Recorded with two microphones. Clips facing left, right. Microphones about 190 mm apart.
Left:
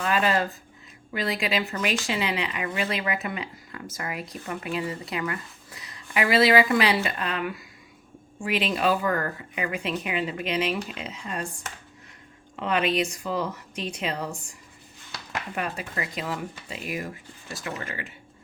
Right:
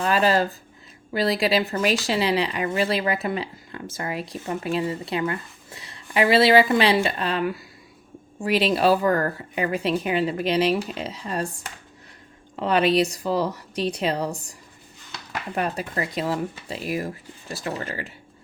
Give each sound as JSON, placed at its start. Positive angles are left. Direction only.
{"t": 0.0, "sound": "speech", "side_deg": -35}
{"t": 12.5, "sound": "speech", "side_deg": -35}
{"t": 15.5, "sound": "speech", "side_deg": -40}